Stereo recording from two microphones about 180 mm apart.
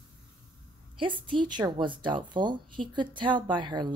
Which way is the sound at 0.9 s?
30° right (ahead or behind).